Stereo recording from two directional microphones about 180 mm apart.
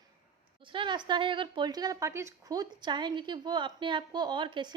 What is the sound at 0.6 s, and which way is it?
A woman's voice, 30° right (ahead or behind).